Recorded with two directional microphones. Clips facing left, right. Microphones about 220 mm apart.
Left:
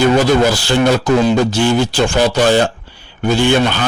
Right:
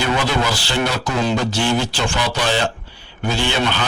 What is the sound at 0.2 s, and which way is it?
Speech, 45° left (ahead or behind).